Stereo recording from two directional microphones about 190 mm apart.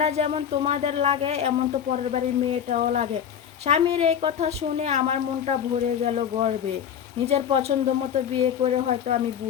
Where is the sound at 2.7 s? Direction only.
40° right (ahead or behind).